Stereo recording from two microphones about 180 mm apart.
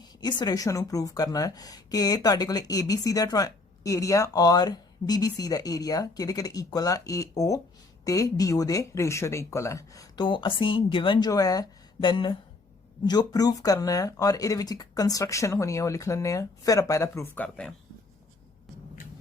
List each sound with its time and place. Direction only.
0.0 s speech: 25° left (ahead or behind); by 17.7 s 5° left (ahead or behind)